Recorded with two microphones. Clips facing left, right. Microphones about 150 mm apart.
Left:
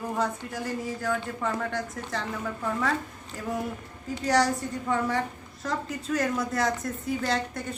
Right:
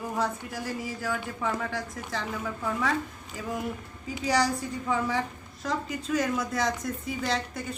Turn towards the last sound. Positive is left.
turn(degrees=0)  # may be behind; listen again after turning